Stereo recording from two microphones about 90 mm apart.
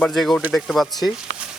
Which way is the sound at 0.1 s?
5° left (ahead or behind).